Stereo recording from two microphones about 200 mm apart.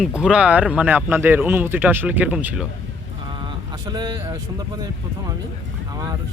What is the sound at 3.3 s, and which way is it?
Speech, 25° right (ahead or behind).